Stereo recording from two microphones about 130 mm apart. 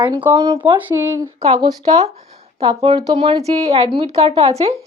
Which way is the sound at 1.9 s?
55° right (ahead or behind).